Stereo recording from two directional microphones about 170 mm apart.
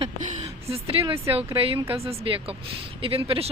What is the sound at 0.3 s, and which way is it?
A woman's voice, 35° right (ahead or behind).